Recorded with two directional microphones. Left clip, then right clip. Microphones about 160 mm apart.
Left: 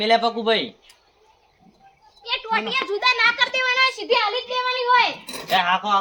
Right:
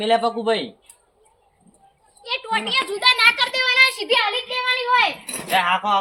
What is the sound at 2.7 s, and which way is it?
A child's voice, 35° right (ahead or behind).